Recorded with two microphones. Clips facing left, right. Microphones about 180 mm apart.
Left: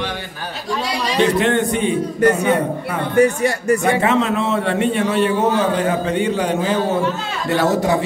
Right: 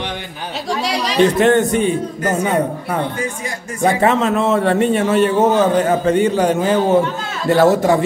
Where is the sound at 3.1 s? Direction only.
70° left (ahead or behind).